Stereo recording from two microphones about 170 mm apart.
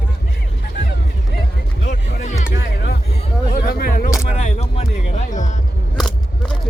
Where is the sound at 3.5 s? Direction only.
60° left (ahead or behind).